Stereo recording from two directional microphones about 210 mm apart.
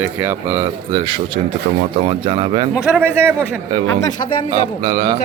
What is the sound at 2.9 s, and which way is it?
A man's voice, 10° right (ahead or behind).